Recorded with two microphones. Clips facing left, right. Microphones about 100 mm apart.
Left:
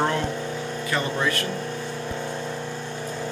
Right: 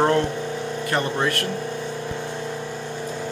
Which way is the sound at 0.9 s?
55° right (ahead or behind).